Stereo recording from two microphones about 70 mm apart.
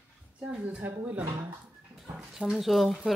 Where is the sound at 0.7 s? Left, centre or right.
Right.